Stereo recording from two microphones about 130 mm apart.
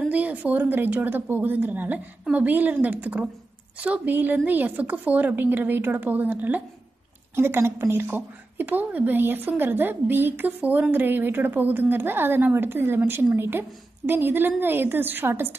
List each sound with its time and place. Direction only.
0.0 s a woman's voice: 10° right (ahead or behind)